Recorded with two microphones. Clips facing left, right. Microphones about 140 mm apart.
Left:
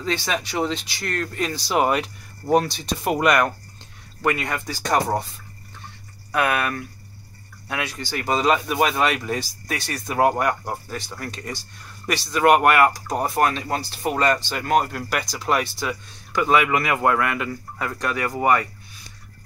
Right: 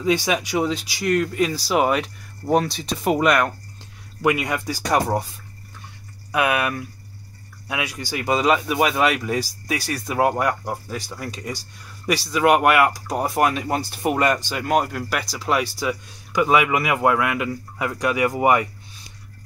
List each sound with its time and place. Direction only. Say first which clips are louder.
0.0 s speech: right 5 dB; 10° right (ahead or behind)
6.3 s speech: right 1 dB; 5° right (ahead or behind)